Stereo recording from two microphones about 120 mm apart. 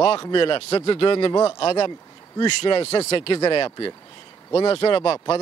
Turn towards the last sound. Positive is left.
turn(degrees=50)  # may be behind; listen again after turning